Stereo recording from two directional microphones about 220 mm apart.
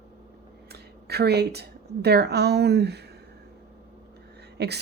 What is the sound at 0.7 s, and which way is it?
A woman's voice, 50° right (ahead or behind).